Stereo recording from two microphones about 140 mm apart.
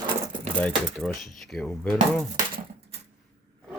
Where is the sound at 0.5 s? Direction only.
10° left (ahead or behind).